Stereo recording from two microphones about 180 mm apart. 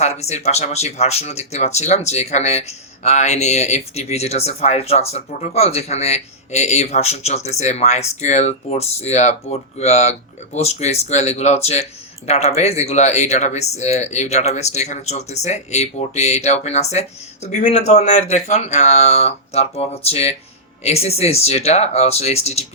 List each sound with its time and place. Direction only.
0.0 s speech: 35° left (ahead or behind)